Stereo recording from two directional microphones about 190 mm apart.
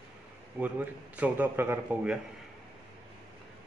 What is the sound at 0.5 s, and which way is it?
A man's voice, 10° right (ahead or behind).